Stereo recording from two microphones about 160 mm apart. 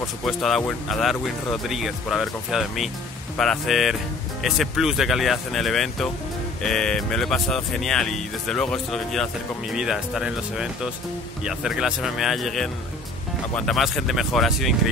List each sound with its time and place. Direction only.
0.2 s speech: centre (ahead or behind)